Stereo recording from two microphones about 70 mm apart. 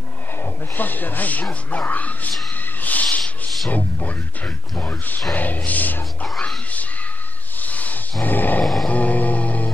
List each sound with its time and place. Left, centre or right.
0.4 s speech: left
2.6 s a sound: left
3.7 s speech: left
7.6 s roar: left
8.8 s music: left